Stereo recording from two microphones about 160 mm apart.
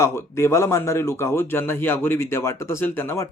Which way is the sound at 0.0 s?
15° left (ahead or behind).